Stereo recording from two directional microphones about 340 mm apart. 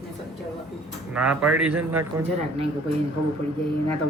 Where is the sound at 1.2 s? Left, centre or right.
Centre.